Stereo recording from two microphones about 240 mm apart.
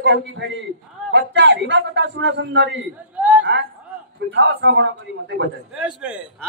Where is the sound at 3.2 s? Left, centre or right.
Centre.